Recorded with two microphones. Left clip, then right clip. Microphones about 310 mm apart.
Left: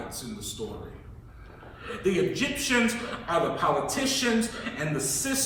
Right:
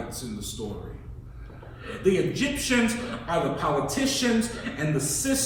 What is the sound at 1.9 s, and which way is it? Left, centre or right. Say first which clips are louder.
Speech: right 2 dB; centre.